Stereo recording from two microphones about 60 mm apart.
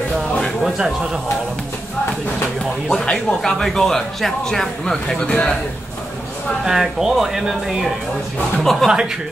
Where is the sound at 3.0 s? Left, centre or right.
Centre.